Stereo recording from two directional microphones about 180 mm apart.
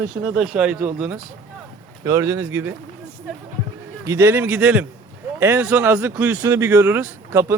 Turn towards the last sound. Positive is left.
turn(degrees=-10)  # may be behind; listen again after turning